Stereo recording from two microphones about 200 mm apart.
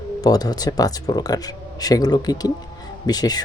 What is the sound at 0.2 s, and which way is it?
Speech, 20° left (ahead or behind).